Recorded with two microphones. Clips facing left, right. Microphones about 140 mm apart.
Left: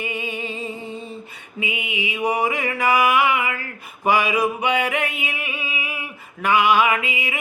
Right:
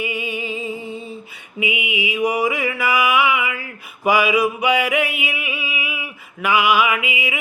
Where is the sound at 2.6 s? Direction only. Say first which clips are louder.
Left 1 dB; 40° left (ahead or behind).